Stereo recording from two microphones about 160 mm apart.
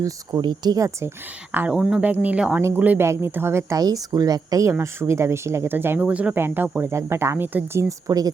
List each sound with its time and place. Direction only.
0.0 s speech: 25° right (ahead or behind)
1.5 s speech: 5° right (ahead or behind)